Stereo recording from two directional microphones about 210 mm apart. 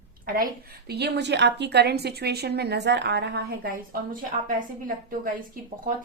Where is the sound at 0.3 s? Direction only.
45° right (ahead or behind).